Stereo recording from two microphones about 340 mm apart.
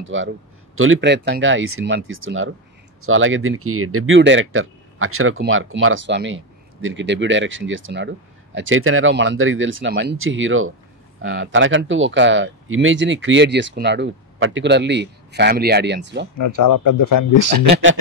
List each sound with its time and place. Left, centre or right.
0.1 s speech: right
16.3 s speech: left